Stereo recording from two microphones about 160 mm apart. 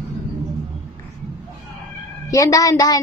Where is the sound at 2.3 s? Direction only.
20° left (ahead or behind).